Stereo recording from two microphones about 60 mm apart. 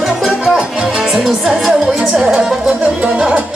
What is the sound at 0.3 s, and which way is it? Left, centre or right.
Music, centre.